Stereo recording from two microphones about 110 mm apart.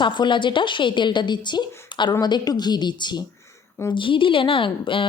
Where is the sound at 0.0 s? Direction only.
45° left (ahead or behind).